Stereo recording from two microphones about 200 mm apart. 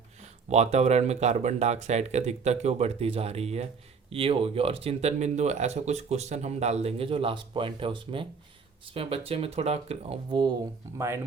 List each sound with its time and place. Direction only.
0.2 s speech: 35° right (ahead or behind)
10.9 s speech: 15° right (ahead or behind)